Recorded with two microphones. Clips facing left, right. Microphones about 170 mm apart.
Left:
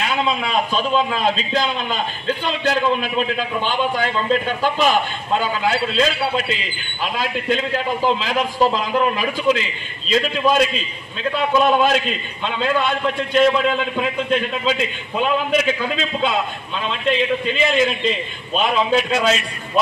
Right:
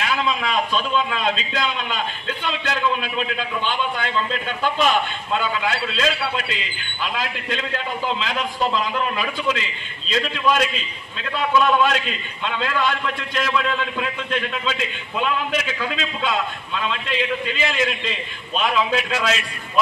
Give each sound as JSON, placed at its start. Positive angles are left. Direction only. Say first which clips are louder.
{"t": 0.0, "sound": "a man's voice", "louder": "left 2 dB", "side_deg": 30}